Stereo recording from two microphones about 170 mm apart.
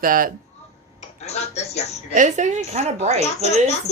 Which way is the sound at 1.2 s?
40° left (ahead or behind).